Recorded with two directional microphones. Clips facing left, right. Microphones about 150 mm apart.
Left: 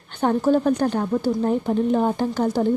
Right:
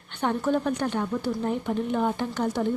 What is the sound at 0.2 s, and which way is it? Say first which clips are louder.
Speech: left 6 dB; 35° left (ahead or behind).